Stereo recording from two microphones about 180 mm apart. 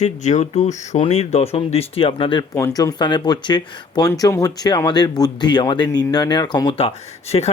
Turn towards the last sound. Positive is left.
turn(degrees=35)  # may be behind; listen again after turning